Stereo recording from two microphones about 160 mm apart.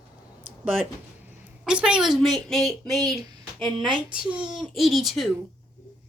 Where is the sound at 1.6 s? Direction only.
5° right (ahead or behind).